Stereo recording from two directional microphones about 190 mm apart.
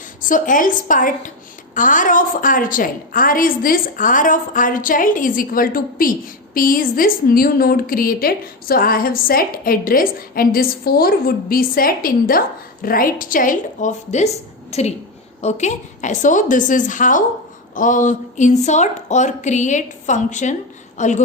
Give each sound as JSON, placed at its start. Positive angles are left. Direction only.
{"t": 0.2, "sound": "a woman's voice", "side_deg": 45}